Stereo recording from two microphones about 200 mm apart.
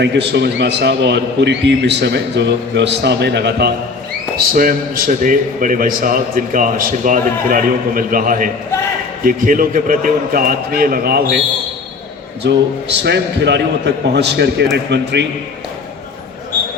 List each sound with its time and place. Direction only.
0.0 s a man's voice: 60° right (ahead or behind)
4.5 s a man's voice: 45° right (ahead or behind)
12.4 s a man's voice: 60° right (ahead or behind)